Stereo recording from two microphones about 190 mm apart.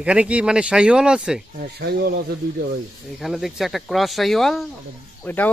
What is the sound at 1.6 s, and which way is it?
Speech, 55° right (ahead or behind).